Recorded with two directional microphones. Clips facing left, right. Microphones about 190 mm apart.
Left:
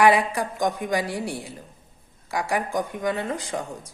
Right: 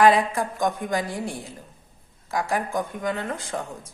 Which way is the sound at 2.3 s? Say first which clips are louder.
Even; 20° left (ahead or behind).